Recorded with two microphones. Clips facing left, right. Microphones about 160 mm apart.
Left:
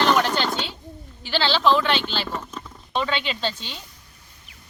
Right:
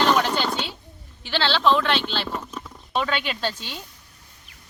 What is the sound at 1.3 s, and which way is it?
Speech, 5° left (ahead or behind).